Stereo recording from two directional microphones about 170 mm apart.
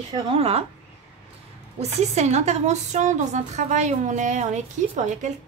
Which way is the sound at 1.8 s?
40° right (ahead or behind).